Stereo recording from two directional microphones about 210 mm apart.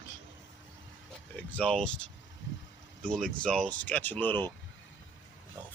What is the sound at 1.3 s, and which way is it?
Speech, 5° left (ahead or behind).